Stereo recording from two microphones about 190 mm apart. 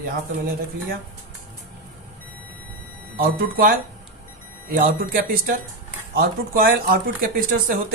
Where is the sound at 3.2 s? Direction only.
50° right (ahead or behind).